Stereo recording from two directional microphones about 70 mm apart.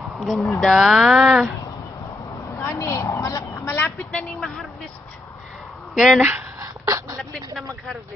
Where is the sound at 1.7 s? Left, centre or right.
Left.